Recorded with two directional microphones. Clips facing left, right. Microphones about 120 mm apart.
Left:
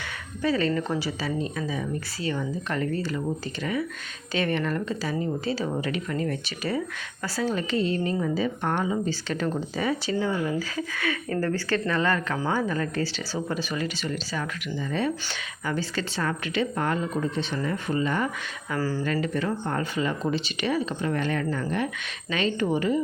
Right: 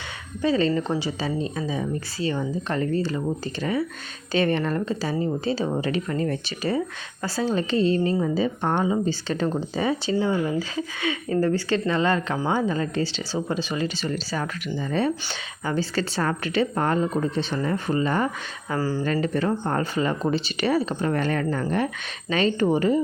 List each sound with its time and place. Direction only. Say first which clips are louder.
0.4 s speech: right 3 dB; 25° right (ahead or behind)
18.8 s speech: right 2 dB; 20° right (ahead or behind)
19.0 s speech: right 3 dB; 35° right (ahead or behind)